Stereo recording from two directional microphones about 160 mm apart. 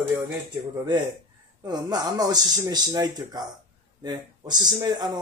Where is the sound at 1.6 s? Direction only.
25° right (ahead or behind).